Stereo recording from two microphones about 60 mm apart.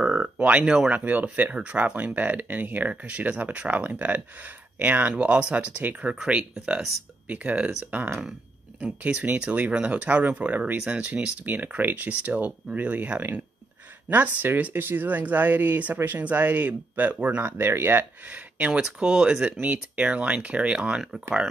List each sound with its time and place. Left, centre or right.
0.0 s a sound: right
0.7 s speech: centre
0.9 s speech: right
6.1 s speech: centre; by 17.5 s right
17.5 s speech: right
18.8 s speech: centre
19.6 s speech: right